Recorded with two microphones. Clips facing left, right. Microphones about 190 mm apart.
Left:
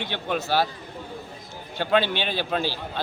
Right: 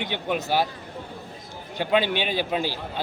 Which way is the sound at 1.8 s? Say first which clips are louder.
Even; 15° right (ahead or behind).